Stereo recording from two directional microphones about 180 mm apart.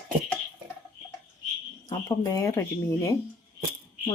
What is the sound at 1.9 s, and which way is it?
Speech, 20° left (ahead or behind).